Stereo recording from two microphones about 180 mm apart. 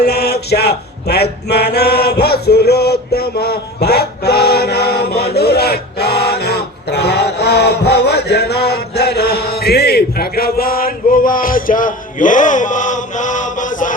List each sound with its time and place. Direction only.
0.0 s mantra: 65° left (ahead or behind); by 13.9 s 45° left (ahead or behind)